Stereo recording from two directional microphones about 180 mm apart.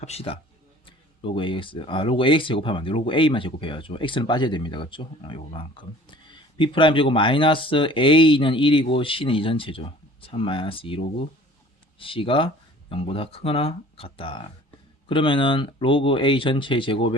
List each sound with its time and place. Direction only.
0.0 s speech: 35° left (ahead or behind)